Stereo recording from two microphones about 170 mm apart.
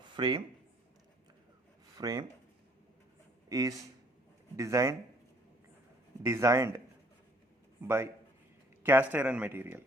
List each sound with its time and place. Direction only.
0.2 s speech: 25° right (ahead or behind)
2.0 s speech: 20° right (ahead or behind)
3.5 s speech: 20° right (ahead or behind)
6.2 s speech: 15° right (ahead or behind)